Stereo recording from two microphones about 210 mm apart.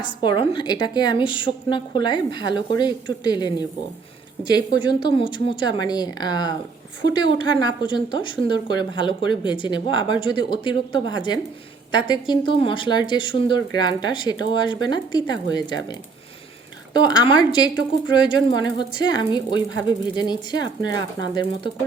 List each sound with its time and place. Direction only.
0.0 s a woman's voice: 20° left (ahead or behind)